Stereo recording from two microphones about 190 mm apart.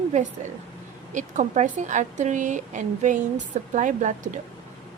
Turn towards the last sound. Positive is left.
turn(degrees=-40)  # may be behind; listen again after turning